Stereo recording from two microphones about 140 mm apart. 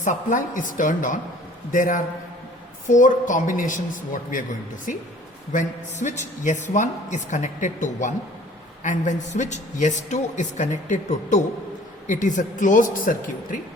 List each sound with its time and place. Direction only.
0.0 s a man's voice: 65° left (ahead or behind)
5.5 s a woman's voice: 60° left (ahead or behind); by 13.6 s 75° left (ahead or behind)